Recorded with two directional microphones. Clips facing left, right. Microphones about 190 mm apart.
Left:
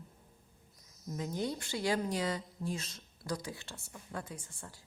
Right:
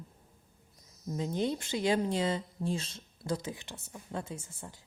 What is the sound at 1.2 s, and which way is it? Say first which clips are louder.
A woman's voice: right 4 dB; 25° right (ahead or behind).